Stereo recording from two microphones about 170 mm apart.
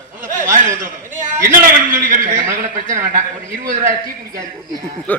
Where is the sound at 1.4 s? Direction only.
55° right (ahead or behind).